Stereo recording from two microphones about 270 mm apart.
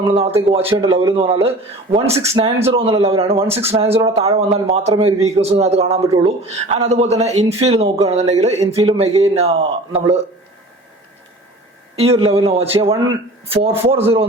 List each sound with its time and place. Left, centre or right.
0.1 s a man's voice: right
11.9 s a man's voice: right